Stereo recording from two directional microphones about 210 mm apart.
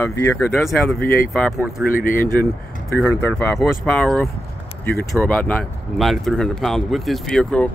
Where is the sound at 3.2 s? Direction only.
Centre (ahead or behind).